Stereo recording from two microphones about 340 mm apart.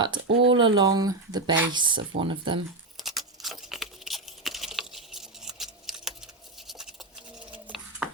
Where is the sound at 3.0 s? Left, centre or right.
Centre.